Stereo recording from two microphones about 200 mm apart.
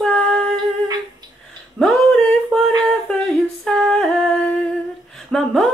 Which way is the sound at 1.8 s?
5° left (ahead or behind).